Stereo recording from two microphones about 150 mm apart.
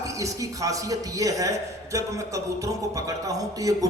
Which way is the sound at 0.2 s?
20° right (ahead or behind).